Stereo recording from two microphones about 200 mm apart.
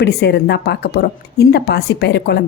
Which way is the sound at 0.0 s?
55° left (ahead or behind).